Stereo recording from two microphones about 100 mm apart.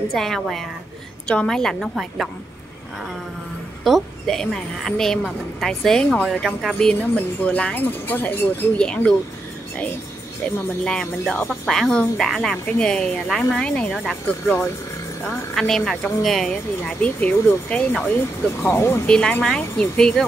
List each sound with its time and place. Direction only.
0.1 s a woman's voice: 5° left (ahead or behind)
3.8 s a woman's voice: centre (ahead or behind)
7.0 s speech: 15° left (ahead or behind)
10.8 s a woman's voice: 5° left (ahead or behind)
15.2 s speech: 5° left (ahead or behind)
18.6 s speech: 25° left (ahead or behind)
19.0 s speech: 10° left (ahead or behind)